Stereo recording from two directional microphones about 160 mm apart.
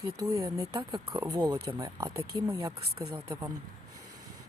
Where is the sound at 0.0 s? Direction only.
20° right (ahead or behind).